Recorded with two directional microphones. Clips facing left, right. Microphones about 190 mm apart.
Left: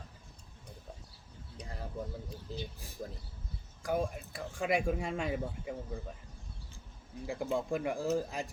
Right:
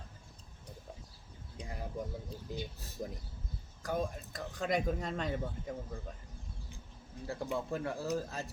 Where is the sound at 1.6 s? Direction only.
15° right (ahead or behind).